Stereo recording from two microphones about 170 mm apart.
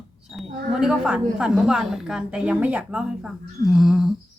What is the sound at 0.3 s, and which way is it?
A woman's voice, 5° right (ahead or behind).